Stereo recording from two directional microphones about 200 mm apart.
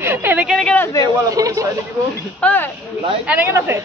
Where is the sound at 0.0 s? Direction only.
10° right (ahead or behind).